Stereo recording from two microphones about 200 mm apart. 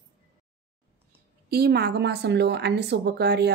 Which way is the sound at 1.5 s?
50° right (ahead or behind).